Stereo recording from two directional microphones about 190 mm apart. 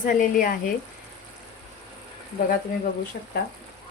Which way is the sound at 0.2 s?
45° left (ahead or behind).